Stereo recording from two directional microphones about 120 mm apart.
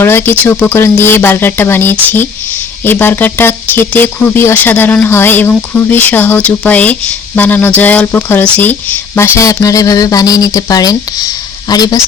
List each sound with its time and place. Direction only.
0.0 s speech: 20° left (ahead or behind)